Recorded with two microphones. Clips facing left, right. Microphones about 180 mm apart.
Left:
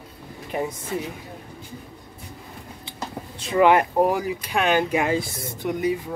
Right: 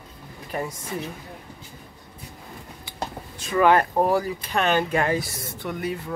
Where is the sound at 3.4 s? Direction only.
20° left (ahead or behind).